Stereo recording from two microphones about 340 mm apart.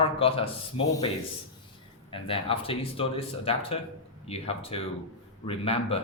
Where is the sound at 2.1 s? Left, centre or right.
Centre.